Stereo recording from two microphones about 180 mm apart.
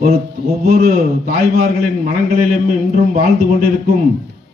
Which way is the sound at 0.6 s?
50° right (ahead or behind).